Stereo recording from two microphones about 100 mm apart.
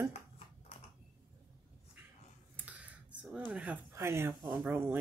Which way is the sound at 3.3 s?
15° right (ahead or behind).